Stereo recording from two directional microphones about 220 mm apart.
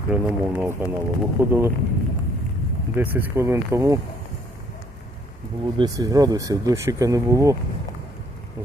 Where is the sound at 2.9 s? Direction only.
10° right (ahead or behind).